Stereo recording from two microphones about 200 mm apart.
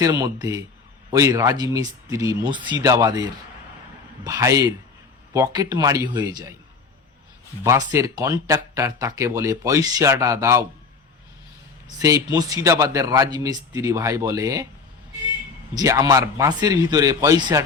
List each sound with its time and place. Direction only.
0.0 s speech: 20° right (ahead or behind)
7.6 s speech: 15° right (ahead or behind)
12.0 s speech: 15° right (ahead or behind)
15.7 s speech: 20° right (ahead or behind)